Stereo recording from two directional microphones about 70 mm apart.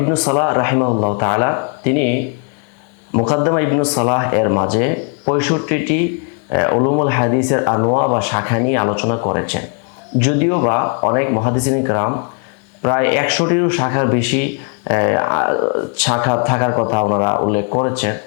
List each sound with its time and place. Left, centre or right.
0.0 s a man's voice: centre